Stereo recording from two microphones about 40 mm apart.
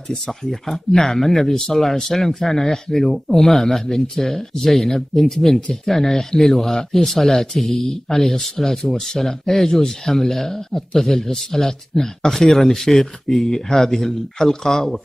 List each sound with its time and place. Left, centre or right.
0.3 s speech: centre